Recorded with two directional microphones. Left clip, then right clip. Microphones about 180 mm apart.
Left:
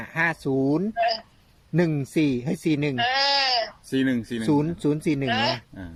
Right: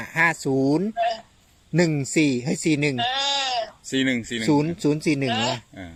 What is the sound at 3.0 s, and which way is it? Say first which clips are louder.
Bleat: left 2 dB; 10° left (ahead or behind).